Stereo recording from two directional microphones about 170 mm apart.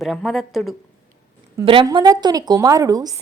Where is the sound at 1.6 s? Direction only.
30° right (ahead or behind).